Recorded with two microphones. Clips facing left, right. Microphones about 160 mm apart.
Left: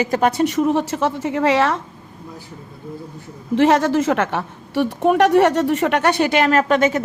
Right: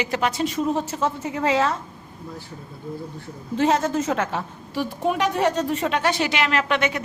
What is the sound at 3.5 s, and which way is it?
A woman's voice, 80° left.